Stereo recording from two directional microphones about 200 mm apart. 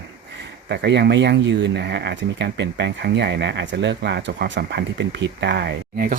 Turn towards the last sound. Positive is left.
turn(degrees=-45)  # may be behind; listen again after turning